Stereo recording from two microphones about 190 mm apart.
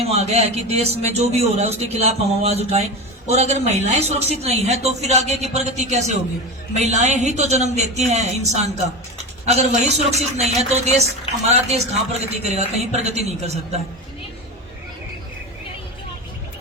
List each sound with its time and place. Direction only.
0.1 s a woman's voice: 35° right (ahead or behind)